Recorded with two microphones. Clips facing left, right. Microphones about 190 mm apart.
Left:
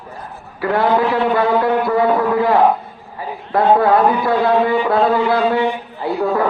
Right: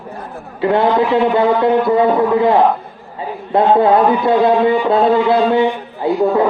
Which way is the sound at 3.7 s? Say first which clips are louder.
Right 1 dB; 20° right (ahead or behind).